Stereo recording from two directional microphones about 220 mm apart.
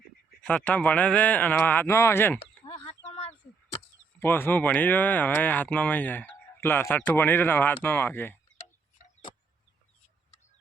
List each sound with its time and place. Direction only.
0.4 s speech: 5° left (ahead or behind)
2.6 s a sound: 25° left (ahead or behind)
4.2 s speech: 10° left (ahead or behind)